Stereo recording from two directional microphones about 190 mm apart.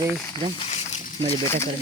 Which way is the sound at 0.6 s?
30° left (ahead or behind).